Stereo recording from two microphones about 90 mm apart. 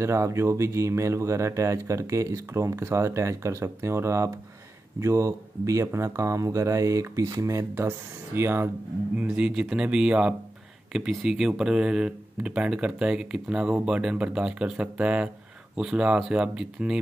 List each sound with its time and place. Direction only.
0.0 s speech: 35° right (ahead or behind); by 17.0 s 10° right (ahead or behind)